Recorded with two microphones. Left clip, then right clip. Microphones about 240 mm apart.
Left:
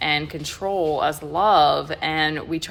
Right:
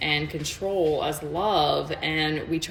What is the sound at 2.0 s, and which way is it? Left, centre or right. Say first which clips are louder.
Speech: left 4 dB; centre.